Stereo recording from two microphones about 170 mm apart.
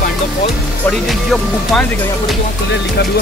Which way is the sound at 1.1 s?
Centre (ahead or behind).